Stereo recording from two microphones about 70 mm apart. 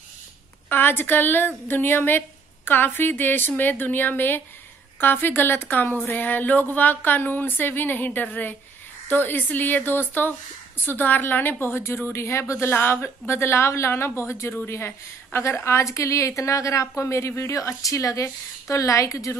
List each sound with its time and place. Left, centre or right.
0.7 s a woman's voice: left
12.7 s a woman's voice: left